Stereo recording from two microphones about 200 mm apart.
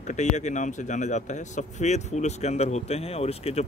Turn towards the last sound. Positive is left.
turn(degrees=30)  # may be behind; listen again after turning